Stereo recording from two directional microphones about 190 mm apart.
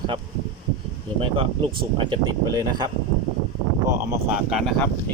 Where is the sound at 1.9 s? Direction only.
25° right (ahead or behind).